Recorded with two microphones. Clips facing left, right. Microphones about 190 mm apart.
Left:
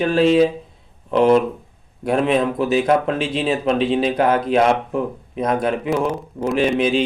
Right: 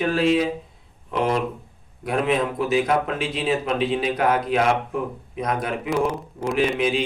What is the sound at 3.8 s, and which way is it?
Speech, 30° left (ahead or behind).